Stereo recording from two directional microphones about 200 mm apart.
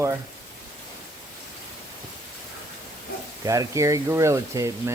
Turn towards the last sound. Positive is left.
turn(degrees=-15)  # may be behind; listen again after turning